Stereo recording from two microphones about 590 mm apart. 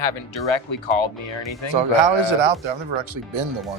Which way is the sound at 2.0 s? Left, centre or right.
Right.